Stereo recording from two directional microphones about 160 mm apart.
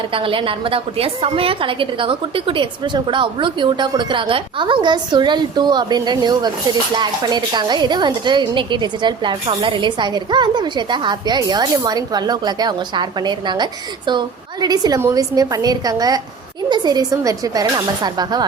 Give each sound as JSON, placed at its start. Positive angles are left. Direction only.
{"t": 0.1, "sound": "a woman's voice", "side_deg": -35}